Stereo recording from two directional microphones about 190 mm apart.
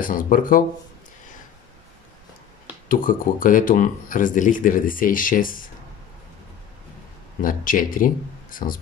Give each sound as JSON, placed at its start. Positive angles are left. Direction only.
{"t": 0.0, "sound": "speech", "side_deg": 45}
{"t": 2.9, "sound": "speech", "side_deg": 45}
{"t": 7.4, "sound": "speech", "side_deg": 45}